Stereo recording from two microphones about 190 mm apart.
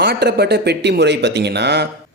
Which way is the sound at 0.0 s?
60° right (ahead or behind).